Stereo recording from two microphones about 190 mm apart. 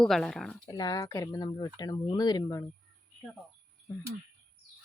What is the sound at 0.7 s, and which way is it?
Speech, 20° left (ahead or behind).